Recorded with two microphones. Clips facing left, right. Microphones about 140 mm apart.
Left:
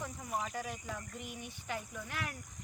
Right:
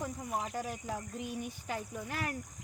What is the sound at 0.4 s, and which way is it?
Speech, 20° right (ahead or behind).